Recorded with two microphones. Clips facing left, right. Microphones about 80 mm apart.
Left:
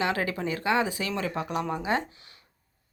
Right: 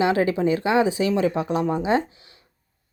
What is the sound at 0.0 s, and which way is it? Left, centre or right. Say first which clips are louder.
Speech: right 8 dB; right.